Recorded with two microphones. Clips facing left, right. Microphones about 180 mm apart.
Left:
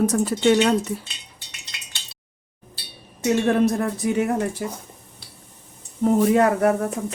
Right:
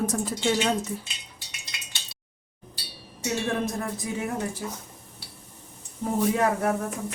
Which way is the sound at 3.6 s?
65° left (ahead or behind).